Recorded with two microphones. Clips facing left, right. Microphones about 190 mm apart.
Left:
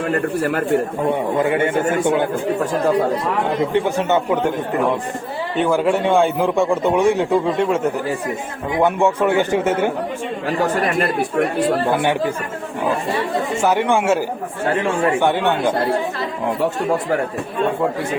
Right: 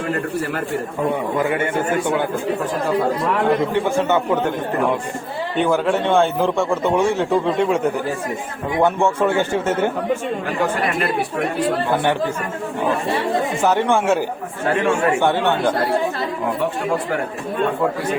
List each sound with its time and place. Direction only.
0.1 s a man's voice: 50° left (ahead or behind)
1.4 s speech: 25° left (ahead or behind)
3.8 s speech: 20° left (ahead or behind)
5.5 s a man's voice: 5° left (ahead or behind)
6.2 s a man's voice: 15° left (ahead or behind)
8.8 s a man's voice: 15° left (ahead or behind)
11.0 s a man's voice: 45° left (ahead or behind)
13.6 s a man's voice: 15° left (ahead or behind)
14.7 s speech: 25° left (ahead or behind)
15.2 s a man's voice: 15° left (ahead or behind)